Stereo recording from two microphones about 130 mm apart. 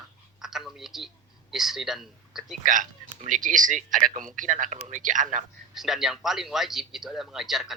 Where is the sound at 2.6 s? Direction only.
85° right.